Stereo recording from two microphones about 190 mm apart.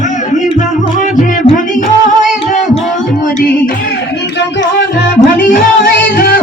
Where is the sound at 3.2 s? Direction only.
50° left (ahead or behind).